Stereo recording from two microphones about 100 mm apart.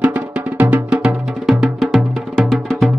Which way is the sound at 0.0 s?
15° right (ahead or behind).